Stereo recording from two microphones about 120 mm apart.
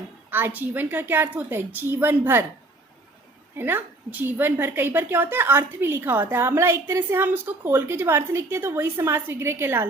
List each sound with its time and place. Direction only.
0.3 s a woman's voice: 15° right (ahead or behind)
3.6 s a woman's voice: 15° right (ahead or behind)